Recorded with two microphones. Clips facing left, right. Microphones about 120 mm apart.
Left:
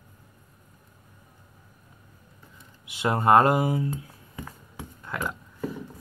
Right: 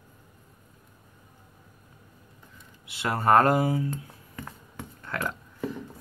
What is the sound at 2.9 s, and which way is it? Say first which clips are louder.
Speech: left 2 dB; 20° left (ahead or behind).